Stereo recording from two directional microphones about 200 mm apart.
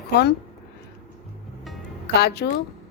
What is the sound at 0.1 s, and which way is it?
Speech, 55° left (ahead or behind).